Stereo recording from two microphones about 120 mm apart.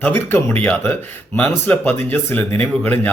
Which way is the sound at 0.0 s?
20° left (ahead or behind).